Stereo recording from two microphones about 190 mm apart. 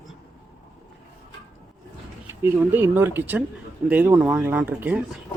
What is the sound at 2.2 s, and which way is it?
Speech, 10° right (ahead or behind).